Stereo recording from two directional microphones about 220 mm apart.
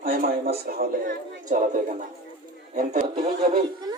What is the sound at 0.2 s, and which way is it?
Speech, 40° right (ahead or behind).